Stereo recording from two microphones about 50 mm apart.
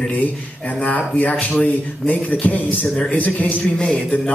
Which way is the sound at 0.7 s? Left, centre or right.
Left.